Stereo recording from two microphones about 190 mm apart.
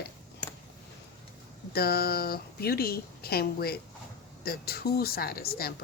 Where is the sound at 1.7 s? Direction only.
55° left (ahead or behind).